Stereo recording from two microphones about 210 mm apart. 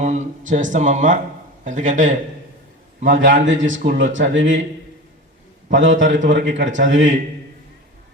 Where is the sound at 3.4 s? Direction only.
65° right (ahead or behind).